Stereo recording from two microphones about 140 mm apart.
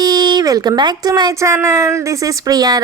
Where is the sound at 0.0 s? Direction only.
30° right (ahead or behind).